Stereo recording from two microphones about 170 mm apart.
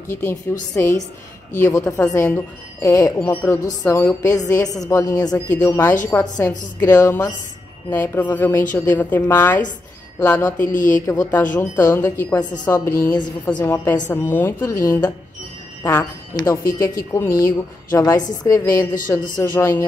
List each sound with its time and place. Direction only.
0.1 s a woman's voice: 15° left (ahead or behind)
5.5 s a woman's voice: 10° left (ahead or behind)
10.6 s speech: 50° left (ahead or behind)
11.1 s a woman's voice: 20° left (ahead or behind)
13.6 s a woman's voice: 10° left (ahead or behind)